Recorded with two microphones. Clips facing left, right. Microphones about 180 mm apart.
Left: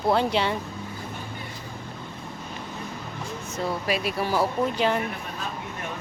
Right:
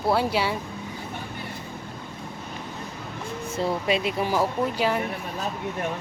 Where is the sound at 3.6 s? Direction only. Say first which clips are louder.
Right 3 dB; 25° right (ahead or behind).